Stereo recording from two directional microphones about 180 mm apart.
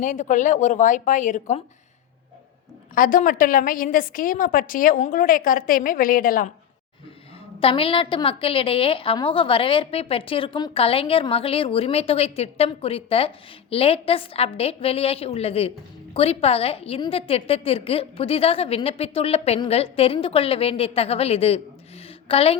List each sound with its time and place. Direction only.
0.0 s a woman's voice: 45° left (ahead or behind)
2.9 s a woman's voice: 50° left (ahead or behind)
7.6 s a woman's voice: 30° left (ahead or behind)